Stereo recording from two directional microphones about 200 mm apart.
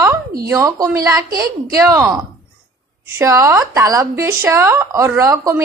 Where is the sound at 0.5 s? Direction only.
15° right (ahead or behind).